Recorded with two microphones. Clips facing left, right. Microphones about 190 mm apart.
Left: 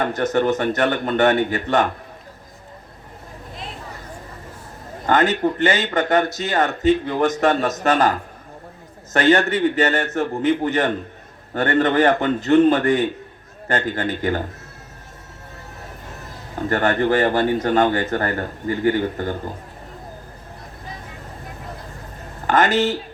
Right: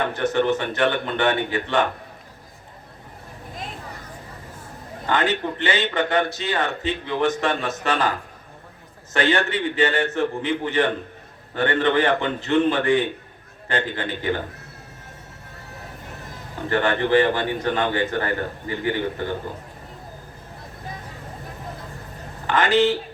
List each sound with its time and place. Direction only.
0.0 s speech: 40° left (ahead or behind)
5.0 s speech: 45° left (ahead or behind)
9.1 s speech: 45° left (ahead or behind)
16.6 s speech: 45° left (ahead or behind)
22.4 s speech: 45° left (ahead or behind)